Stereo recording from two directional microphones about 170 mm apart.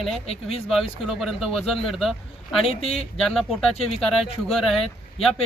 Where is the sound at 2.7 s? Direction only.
35° left (ahead or behind).